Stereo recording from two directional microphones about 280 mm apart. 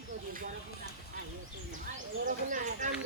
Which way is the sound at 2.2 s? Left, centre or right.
Right.